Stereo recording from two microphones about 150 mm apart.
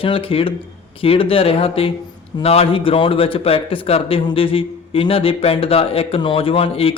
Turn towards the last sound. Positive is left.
turn(degrees=40)  # may be behind; listen again after turning